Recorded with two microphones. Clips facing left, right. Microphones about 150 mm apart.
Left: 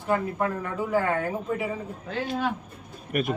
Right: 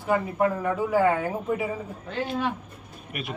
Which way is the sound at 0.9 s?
10° right (ahead or behind).